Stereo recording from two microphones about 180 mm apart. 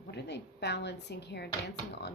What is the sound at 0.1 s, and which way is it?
Speech, 70° left (ahead or behind).